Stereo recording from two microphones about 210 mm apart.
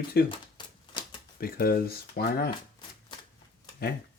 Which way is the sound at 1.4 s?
45° left (ahead or behind).